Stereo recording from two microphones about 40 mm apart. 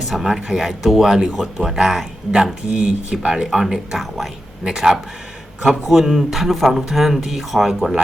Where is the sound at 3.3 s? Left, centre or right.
Centre.